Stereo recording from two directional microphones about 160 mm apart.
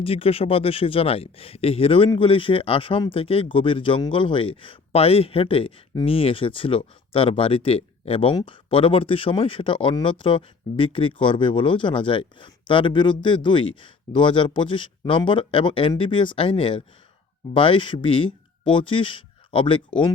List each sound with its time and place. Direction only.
0.0 s speech: 35° left (ahead or behind)